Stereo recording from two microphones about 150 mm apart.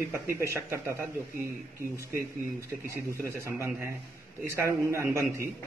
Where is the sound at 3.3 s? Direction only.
20° right (ahead or behind).